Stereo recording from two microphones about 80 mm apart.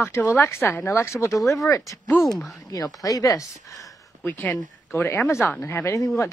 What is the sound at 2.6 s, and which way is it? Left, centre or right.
Speech, left.